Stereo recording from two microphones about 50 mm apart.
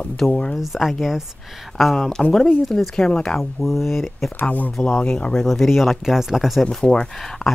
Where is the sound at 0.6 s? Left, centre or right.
Centre.